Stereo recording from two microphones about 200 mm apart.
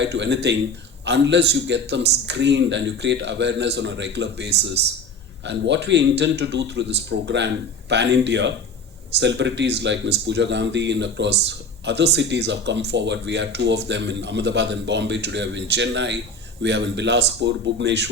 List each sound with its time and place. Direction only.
0.0 s speech: 60° right (ahead or behind)